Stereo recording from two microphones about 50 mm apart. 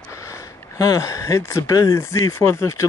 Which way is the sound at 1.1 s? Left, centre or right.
Left.